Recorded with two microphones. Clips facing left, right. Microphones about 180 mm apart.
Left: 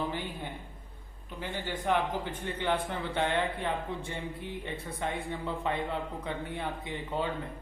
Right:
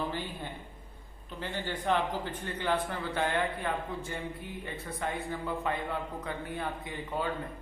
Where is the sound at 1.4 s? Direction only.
15° left (ahead or behind).